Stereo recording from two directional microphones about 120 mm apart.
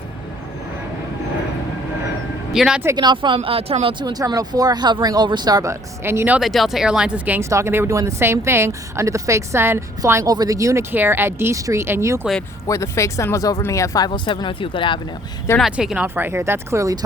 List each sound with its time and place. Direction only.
2.5 s speech: 5° right (ahead or behind)
2.9 s speech: 40° right (ahead or behind); by 3.9 s 55° right (ahead or behind)
4.0 s speech: 35° right (ahead or behind)
6.0 s speech: 20° right (ahead or behind)
6.4 s speech: centre (ahead or behind); by 12.2 s 25° right (ahead or behind)
12.6 s speech: 25° left (ahead or behind); by 14.9 s 45° left (ahead or behind)
15.6 s speech: 5° right (ahead or behind)
16.0 s speech: 20° right (ahead or behind)